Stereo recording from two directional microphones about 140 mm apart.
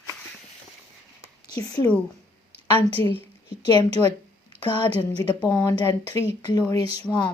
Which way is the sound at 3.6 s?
30° left (ahead or behind).